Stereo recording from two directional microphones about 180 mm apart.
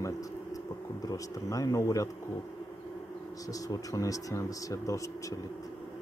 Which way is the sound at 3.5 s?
20° left (ahead or behind).